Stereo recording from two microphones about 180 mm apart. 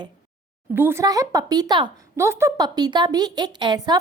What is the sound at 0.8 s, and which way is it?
A woman's voice, 15° right (ahead or behind).